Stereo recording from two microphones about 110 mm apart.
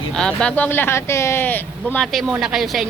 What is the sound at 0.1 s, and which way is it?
Speech, 5° left (ahead or behind).